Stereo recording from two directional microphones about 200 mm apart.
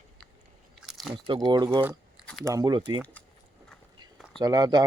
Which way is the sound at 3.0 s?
5° left (ahead or behind).